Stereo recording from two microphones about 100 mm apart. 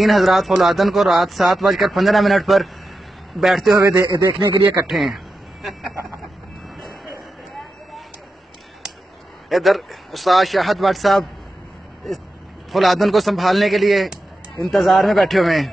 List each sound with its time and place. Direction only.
0.0 s speech: centre (ahead or behind)
4.1 s speech: 45° right (ahead or behind)
4.7 s speech: 5° right (ahead or behind)
9.5 s speech: centre (ahead or behind)
12.7 s speech: centre (ahead or behind)